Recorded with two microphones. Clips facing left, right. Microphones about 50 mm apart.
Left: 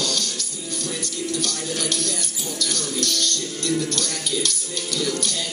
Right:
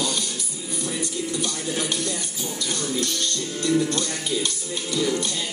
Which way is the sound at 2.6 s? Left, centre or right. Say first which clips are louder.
Even; right.